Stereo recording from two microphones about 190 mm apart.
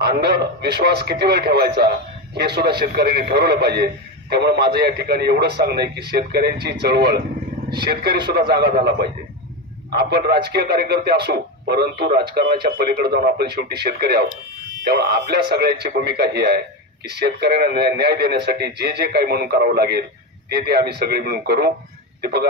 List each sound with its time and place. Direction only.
0.0 s a man's voice: 60° right (ahead or behind)